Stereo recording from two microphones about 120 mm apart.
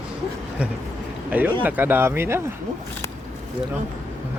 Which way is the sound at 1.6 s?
15° right (ahead or behind).